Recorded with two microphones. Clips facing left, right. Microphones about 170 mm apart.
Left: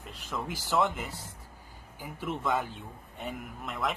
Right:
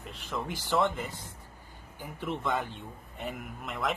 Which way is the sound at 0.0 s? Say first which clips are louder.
Right 1 dB; centre (ahead or behind).